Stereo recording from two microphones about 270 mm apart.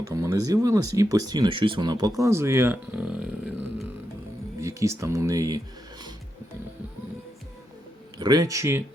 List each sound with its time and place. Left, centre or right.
0.1 s speech: centre
8.2 s speech: centre